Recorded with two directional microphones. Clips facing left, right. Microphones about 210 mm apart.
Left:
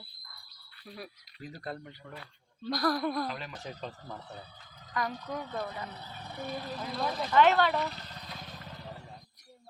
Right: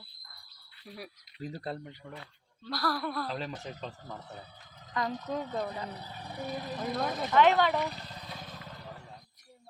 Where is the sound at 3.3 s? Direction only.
30° right (ahead or behind).